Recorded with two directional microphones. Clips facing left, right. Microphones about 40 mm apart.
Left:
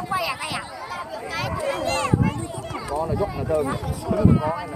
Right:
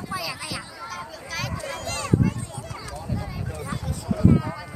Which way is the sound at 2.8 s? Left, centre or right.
Left.